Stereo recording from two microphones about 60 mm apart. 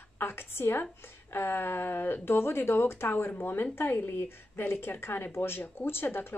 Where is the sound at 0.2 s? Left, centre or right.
Left.